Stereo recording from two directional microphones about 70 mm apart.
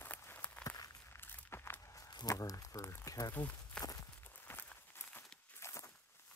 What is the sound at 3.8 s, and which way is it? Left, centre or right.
Walk, left.